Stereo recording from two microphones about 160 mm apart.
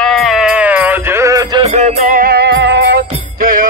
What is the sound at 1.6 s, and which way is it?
Music, 45° right (ahead or behind).